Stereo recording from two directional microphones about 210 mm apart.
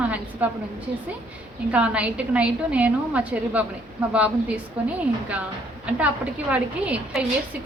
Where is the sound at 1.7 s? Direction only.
5° right (ahead or behind).